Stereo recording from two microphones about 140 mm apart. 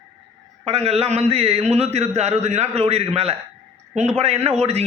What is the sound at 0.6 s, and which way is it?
A man's voice, 45° right (ahead or behind).